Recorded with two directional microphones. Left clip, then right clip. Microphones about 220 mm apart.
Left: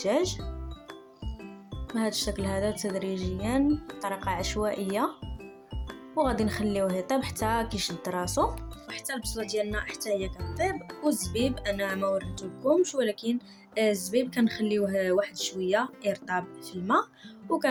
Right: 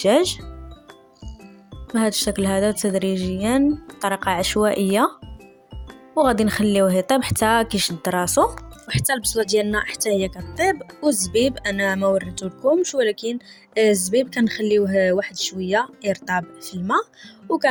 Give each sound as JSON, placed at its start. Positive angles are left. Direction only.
{"t": 0.0, "sound": "speech", "side_deg": -35}
{"t": 2.0, "sound": "speech", "side_deg": -30}
{"t": 6.1, "sound": "speech", "side_deg": -30}
{"t": 10.3, "sound": "speech", "side_deg": 0}
{"t": 10.6, "sound": "speech", "side_deg": -40}